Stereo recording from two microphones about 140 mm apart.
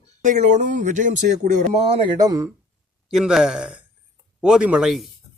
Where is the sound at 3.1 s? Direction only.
5° right (ahead or behind).